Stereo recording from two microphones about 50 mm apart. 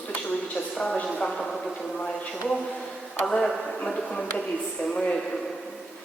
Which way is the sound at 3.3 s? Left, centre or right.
Centre.